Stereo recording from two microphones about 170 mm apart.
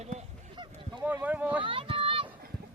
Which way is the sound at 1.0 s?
10° right (ahead or behind).